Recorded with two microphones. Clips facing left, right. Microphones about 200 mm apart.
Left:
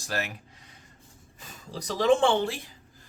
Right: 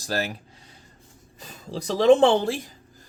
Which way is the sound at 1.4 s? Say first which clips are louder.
Right 6 dB; 35° right (ahead or behind).